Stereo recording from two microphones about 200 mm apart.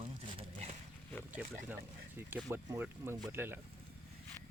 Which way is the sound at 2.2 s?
10° right (ahead or behind).